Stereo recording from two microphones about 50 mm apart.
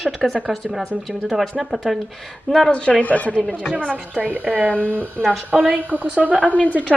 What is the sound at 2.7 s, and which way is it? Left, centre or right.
Speech, left.